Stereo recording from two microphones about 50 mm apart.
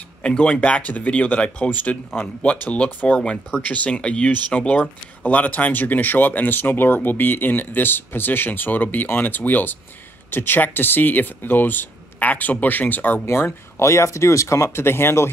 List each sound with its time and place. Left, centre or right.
0.4 s speech: left
13.2 s speech: left